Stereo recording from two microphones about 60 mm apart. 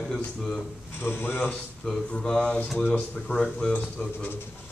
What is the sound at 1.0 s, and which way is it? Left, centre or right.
Speech, left.